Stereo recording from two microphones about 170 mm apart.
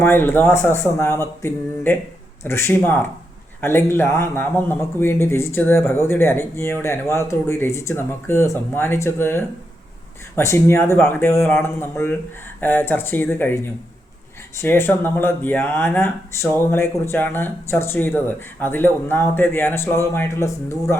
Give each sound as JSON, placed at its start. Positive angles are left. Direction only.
{"t": 0.0, "sound": "speech", "side_deg": 15}